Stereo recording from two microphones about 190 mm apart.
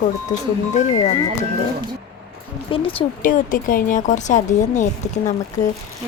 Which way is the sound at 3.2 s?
45° left (ahead or behind).